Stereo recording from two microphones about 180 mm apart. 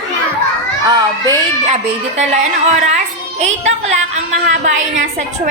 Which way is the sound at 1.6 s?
40° right (ahead or behind).